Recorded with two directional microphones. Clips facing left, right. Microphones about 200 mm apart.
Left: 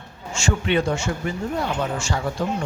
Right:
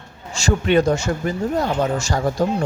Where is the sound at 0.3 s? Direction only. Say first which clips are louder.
Right 5 dB; 40° right (ahead or behind).